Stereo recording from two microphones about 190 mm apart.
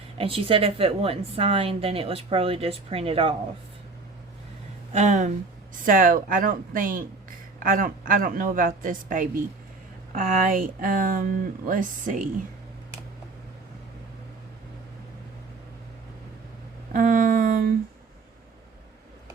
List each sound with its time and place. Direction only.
0.2 s a woman's voice: 30° right (ahead or behind)
4.9 s a woman's voice: 40° right (ahead or behind)
16.9 s a sound: 45° right (ahead or behind)